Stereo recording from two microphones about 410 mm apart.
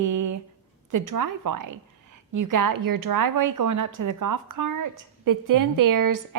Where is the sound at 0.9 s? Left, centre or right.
Right.